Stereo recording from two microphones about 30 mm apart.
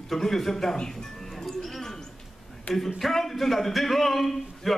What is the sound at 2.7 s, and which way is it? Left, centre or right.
A man's voice, centre.